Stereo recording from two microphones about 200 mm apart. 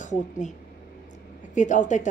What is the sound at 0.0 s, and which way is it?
Speech, 35° left (ahead or behind).